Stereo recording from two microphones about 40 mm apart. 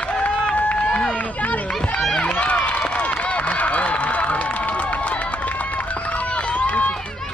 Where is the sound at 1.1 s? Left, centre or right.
Left.